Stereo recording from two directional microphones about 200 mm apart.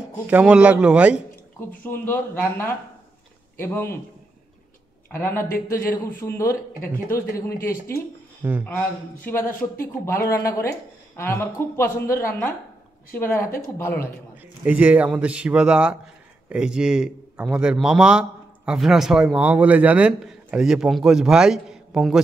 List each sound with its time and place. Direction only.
0.3 s a man's voice: 5° right (ahead or behind)
1.9 s a woman's voice: 10° left (ahead or behind)
5.1 s a woman's voice: 10° left (ahead or behind)
8.4 s a man's voice: 10° right (ahead or behind)
8.6 s a woman's voice: 10° left (ahead or behind)
14.6 s a man's voice: 5° right (ahead or behind)